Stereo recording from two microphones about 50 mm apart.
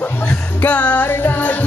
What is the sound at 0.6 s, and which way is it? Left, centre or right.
Music, left.